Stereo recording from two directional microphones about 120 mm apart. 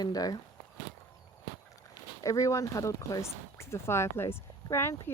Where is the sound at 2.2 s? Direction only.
25° left (ahead or behind).